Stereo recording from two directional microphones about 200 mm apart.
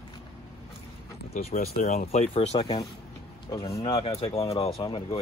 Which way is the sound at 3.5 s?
20° left (ahead or behind).